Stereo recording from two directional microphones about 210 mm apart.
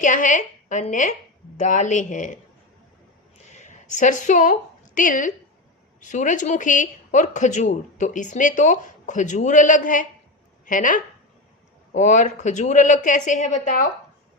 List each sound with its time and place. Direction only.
0.0 s a woman's voice: 35° left (ahead or behind)
3.5 s speech: 35° left (ahead or behind)